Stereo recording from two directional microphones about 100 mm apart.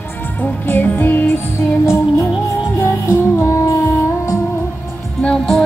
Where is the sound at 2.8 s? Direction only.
30° left (ahead or behind).